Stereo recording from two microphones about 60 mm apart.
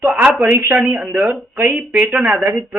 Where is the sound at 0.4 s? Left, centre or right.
Right.